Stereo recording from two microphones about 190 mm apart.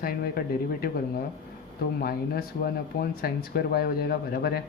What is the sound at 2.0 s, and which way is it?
Speech, 55° left (ahead or behind).